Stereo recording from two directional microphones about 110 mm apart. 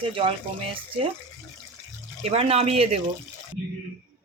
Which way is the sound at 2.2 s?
70° right (ahead or behind).